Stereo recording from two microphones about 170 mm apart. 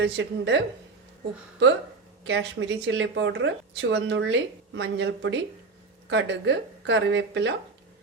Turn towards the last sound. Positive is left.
turn(degrees=-90)